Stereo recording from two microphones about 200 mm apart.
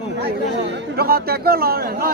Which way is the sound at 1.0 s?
50° right (ahead or behind).